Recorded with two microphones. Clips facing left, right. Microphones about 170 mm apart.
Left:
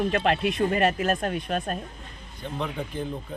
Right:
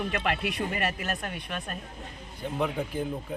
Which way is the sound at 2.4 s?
10° right (ahead or behind).